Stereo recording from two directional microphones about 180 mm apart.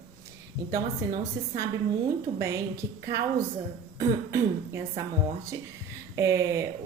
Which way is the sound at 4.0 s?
15° right (ahead or behind).